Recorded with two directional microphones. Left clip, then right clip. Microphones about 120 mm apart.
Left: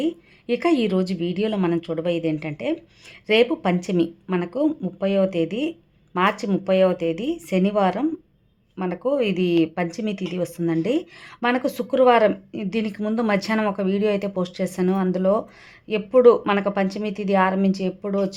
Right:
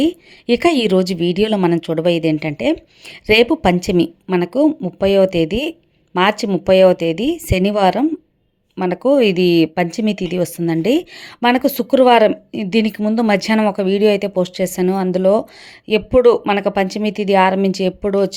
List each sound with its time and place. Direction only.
0.0 s speech: 50° right (ahead or behind)
8.8 s speech: 60° right (ahead or behind)